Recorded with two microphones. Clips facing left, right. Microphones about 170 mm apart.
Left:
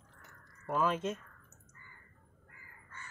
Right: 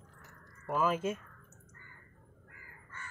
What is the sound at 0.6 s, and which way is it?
Speech, 5° right (ahead or behind).